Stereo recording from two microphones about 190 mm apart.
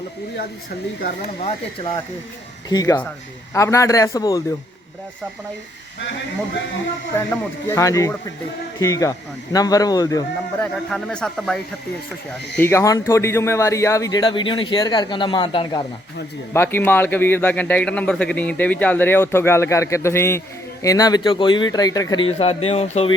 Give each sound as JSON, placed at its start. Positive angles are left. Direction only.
{"t": 1.2, "sound": "speech", "side_deg": 35}
{"t": 2.6, "sound": "a man's voice", "side_deg": 20}
{"t": 7.3, "sound": "a man's voice", "side_deg": 15}
{"t": 10.6, "sound": "speech", "side_deg": 5}
{"t": 12.5, "sound": "speech", "side_deg": 15}
{"t": 16.5, "sound": "a man's voice", "side_deg": 10}